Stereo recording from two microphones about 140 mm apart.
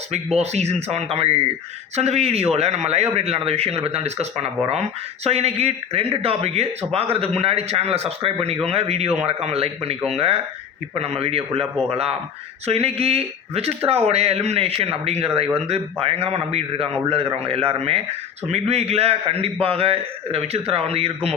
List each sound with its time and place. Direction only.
0.3 s speech: 50° right (ahead or behind)